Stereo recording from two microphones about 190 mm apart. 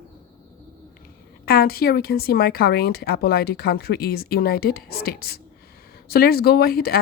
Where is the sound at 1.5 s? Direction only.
50° left (ahead or behind).